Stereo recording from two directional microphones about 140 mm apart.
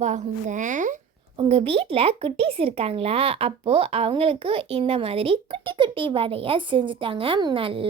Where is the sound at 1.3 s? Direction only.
45° right (ahead or behind).